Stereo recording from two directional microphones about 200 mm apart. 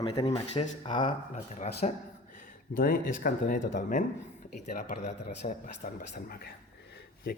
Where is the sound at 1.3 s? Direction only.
35° left (ahead or behind).